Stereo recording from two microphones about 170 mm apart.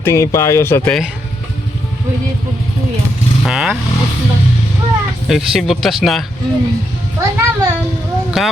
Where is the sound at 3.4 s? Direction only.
5° right (ahead or behind).